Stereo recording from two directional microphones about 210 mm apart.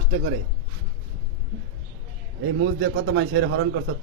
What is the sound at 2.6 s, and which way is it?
Speech, 70° right (ahead or behind).